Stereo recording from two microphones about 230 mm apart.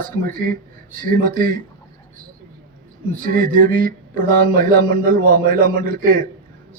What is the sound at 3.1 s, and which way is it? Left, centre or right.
Speech, right.